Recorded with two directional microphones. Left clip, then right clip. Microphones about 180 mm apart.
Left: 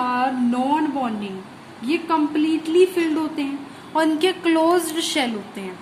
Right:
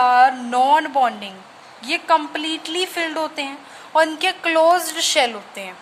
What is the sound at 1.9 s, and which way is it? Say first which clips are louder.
A woman's voice: right 3 dB; 50° right (ahead or behind).